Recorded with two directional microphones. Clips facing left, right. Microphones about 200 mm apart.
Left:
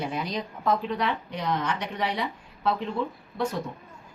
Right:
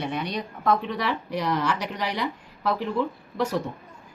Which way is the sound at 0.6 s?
75° right (ahead or behind).